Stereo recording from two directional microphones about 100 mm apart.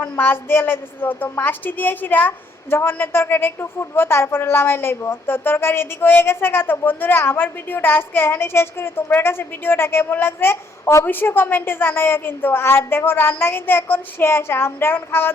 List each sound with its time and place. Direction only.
0.2 s a woman's voice: 20° left (ahead or behind)